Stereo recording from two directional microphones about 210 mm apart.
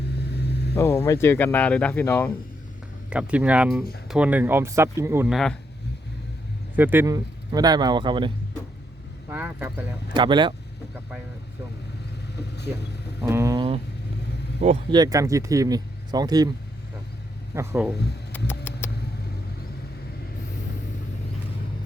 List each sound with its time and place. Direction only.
0.2 s vehicle: 50° left (ahead or behind)
0.8 s speech: 15° left (ahead or behind)
3.1 s speech: 5° right (ahead or behind)
6.7 s a man's voice: 10° right (ahead or behind)
9.3 s speech: 10° right (ahead or behind)
10.2 s a man's voice: 20° right (ahead or behind)
13.2 s vehicle: 15° right (ahead or behind)
14.6 s speech: 30° right (ahead or behind)
14.9 s speech: 15° right (ahead or behind)
17.5 s speech: 10° right (ahead or behind)
18.3 s patter: 10° left (ahead or behind)